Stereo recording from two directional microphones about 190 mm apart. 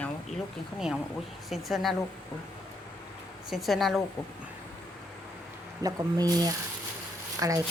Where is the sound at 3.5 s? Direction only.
Centre (ahead or behind).